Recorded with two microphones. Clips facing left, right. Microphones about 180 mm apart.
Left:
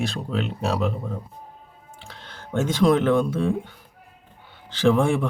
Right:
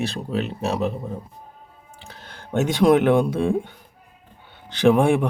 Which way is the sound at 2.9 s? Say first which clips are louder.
Right 4 dB; 15° right (ahead or behind).